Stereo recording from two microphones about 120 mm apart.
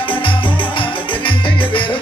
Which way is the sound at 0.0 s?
45° left (ahead or behind).